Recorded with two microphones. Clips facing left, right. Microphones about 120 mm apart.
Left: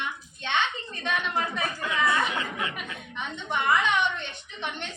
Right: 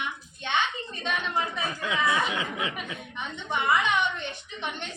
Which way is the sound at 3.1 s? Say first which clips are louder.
Left 1 dB; 15° right (ahead or behind).